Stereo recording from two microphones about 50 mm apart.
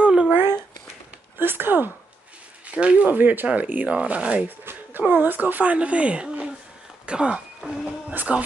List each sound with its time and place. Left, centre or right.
0.0 s a sound: right
1.4 s speech: right
2.6 s speech: right
3.2 s speech: right
3.4 s speech: right
4.5 s speech: right
8.1 s speech: right